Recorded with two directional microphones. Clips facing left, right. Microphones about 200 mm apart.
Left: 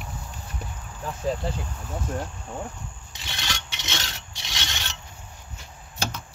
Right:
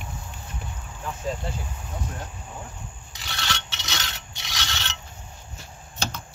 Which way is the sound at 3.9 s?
30° left (ahead or behind).